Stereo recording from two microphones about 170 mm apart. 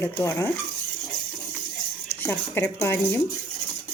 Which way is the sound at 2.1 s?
10° left (ahead or behind).